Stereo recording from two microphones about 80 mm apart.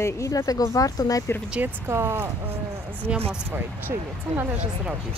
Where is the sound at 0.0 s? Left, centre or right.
Left.